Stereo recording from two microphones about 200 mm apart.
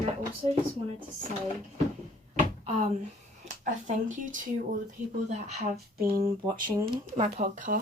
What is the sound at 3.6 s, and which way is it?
Speech, 40° right (ahead or behind).